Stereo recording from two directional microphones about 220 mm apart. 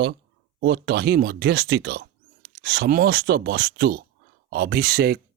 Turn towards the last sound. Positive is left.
turn(degrees=-40)  # may be behind; listen again after turning